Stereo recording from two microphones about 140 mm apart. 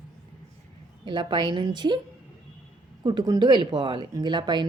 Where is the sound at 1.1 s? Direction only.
35° right (ahead or behind).